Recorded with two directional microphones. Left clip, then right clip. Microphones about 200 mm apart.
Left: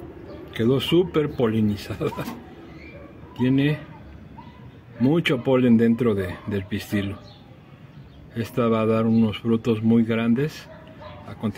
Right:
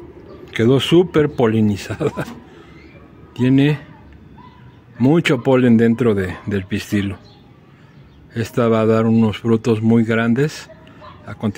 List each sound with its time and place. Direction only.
0.5 s speech: 45° right (ahead or behind)
3.3 s speech: 45° right (ahead or behind)
5.0 s speech: 45° right (ahead or behind)
8.4 s speech: 45° right (ahead or behind)